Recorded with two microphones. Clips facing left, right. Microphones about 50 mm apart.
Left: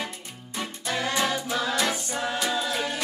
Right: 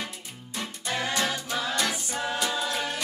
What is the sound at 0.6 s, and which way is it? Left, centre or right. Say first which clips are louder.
Music: left 2 dB; centre.